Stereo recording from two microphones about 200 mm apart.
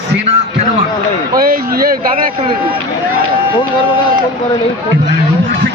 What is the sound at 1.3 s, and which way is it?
Speech, 45° right (ahead or behind).